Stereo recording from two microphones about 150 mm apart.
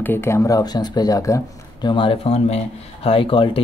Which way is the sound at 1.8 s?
35° left (ahead or behind).